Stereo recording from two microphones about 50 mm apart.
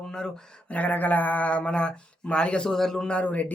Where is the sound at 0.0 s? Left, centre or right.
Centre.